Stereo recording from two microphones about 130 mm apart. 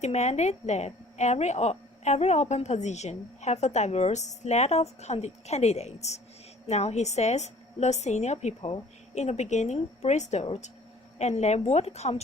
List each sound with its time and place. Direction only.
0.0 s a woman's voice: 60° left (ahead or behind)